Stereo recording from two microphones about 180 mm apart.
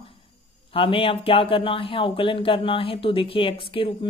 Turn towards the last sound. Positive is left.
turn(degrees=30)  # may be behind; listen again after turning